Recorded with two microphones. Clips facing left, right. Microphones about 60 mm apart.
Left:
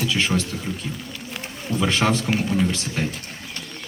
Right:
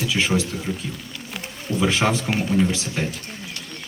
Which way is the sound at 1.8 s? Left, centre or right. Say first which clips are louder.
Even; centre.